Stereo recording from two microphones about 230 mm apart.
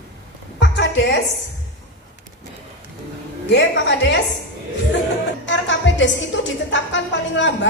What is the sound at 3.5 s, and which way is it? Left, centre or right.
Speech, left.